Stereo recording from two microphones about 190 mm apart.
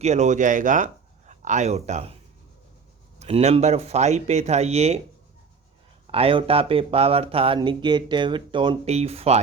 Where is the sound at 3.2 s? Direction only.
35° right (ahead or behind).